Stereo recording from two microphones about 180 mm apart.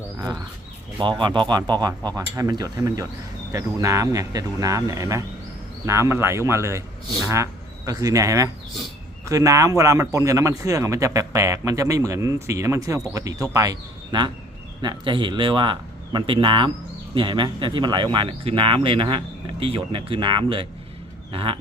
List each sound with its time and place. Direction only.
1.2 s a man's voice: 25° right (ahead or behind)